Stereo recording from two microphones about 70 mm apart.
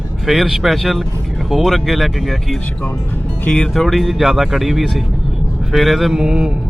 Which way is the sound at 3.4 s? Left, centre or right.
Centre.